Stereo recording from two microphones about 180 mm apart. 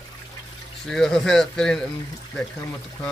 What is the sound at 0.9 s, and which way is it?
Speech, centre (ahead or behind).